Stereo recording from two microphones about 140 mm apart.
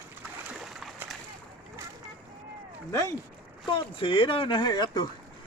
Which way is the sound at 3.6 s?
35° left (ahead or behind).